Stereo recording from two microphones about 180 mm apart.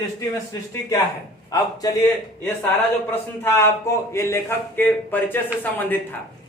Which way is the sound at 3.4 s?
15° left (ahead or behind).